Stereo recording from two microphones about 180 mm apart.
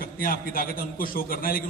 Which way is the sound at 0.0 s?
50° left (ahead or behind).